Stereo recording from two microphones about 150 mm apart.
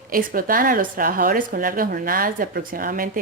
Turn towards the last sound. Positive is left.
turn(degrees=-70)  # may be behind; listen again after turning